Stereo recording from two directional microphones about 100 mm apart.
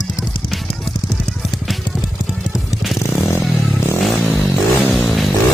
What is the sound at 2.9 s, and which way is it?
Motorcycle, 30° left (ahead or behind).